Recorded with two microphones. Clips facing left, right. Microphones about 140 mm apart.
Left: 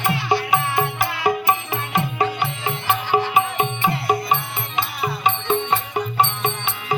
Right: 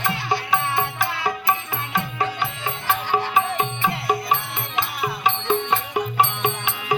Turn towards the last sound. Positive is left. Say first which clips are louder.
# even
turn(degrees=-10)  # may be behind; listen again after turning